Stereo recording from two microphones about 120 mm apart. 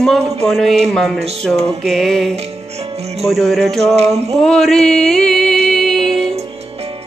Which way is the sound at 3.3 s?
Centre (ahead or behind).